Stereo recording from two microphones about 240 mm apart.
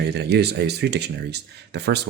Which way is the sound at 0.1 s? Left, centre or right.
Right.